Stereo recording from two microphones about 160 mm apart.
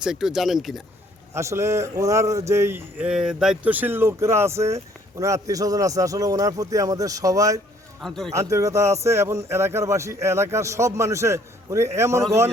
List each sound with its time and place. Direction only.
0.0 s speech: 5° right (ahead or behind)
1.3 s speech: 15° right (ahead or behind)
8.0 s speech: centre (ahead or behind)
8.3 s speech: 20° right (ahead or behind)